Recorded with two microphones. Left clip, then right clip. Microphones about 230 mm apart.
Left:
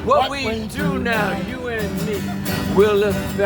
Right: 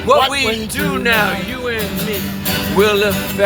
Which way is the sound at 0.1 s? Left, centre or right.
Centre.